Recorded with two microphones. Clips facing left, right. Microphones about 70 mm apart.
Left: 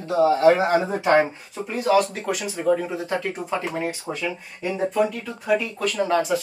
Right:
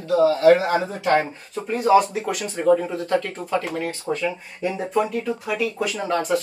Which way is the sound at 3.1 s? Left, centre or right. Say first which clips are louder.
Right 5 dB; centre.